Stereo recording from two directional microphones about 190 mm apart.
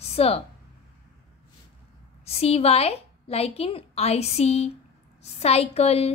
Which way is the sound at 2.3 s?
30° left (ahead or behind).